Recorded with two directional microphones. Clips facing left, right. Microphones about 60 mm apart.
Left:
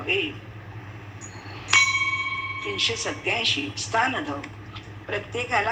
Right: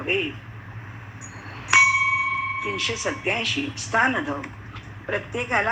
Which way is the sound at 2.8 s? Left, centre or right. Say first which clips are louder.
Right 2 dB; centre.